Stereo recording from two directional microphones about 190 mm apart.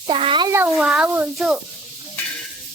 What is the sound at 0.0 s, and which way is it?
Speech, 25° right (ahead or behind).